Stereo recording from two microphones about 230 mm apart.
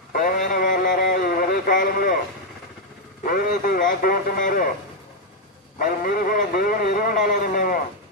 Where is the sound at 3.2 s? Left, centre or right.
Left.